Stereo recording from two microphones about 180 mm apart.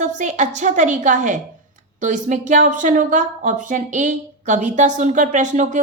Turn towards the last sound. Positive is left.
turn(degrees=-45)  # may be behind; listen again after turning